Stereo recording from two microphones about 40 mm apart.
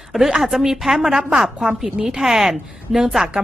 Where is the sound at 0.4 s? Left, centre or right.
Centre.